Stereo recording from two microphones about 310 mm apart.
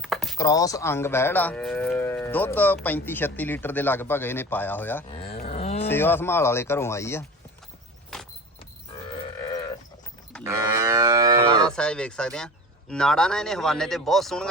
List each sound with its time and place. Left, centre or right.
0.0 s speech: centre
5.0 s a sound: centre
5.9 s speech: centre
8.1 s vehicle: centre
10.4 s livestock: centre
11.8 s speech: centre